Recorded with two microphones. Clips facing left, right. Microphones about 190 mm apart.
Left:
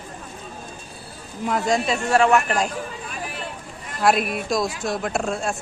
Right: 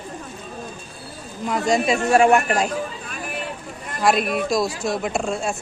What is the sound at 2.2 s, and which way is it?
Speech, 40° right (ahead or behind).